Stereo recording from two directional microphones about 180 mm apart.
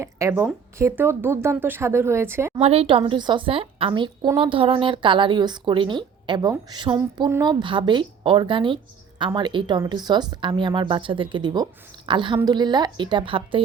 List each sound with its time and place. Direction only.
0.0 s speech: 15° right (ahead or behind)
2.6 s a woman's voice: 35° right (ahead or behind)